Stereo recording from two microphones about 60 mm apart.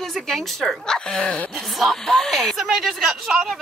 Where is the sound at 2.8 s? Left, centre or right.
Centre.